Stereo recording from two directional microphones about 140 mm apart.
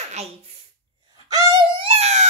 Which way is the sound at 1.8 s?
50° right (ahead or behind).